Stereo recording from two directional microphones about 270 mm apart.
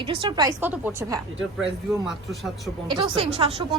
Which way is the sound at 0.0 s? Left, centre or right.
Centre.